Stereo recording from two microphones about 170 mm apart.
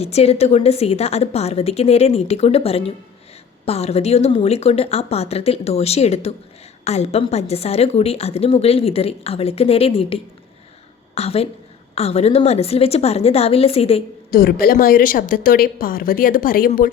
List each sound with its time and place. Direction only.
0.0 s a woman's voice: 35° left (ahead or behind)
14.3 s a woman's voice: 60° left (ahead or behind)